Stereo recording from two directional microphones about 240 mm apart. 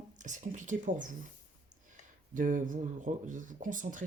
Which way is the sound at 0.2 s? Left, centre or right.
Right.